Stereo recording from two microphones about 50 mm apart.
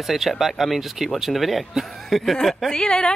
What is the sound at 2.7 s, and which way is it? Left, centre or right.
Speech, centre.